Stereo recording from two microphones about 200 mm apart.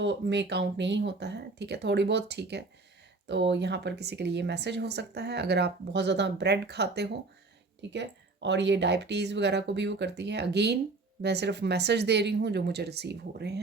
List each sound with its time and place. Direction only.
0.0 s speech: 60° right (ahead or behind)